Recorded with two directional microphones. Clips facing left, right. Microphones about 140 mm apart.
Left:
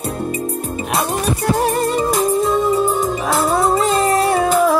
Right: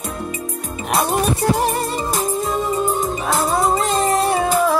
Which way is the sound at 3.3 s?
5° left (ahead or behind).